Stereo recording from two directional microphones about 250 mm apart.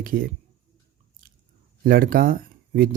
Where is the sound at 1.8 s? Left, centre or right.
Right.